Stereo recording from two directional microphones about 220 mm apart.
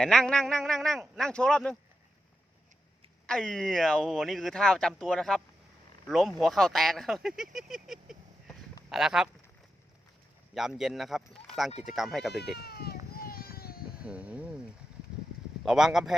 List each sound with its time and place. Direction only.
0.0 s speech: centre (ahead or behind)
3.2 s speech: 5° left (ahead or behind)
10.5 s speech: centre (ahead or behind)
12.5 s a sound: 45° left (ahead or behind)
14.0 s a sound: 5° right (ahead or behind)
15.6 s speech: centre (ahead or behind)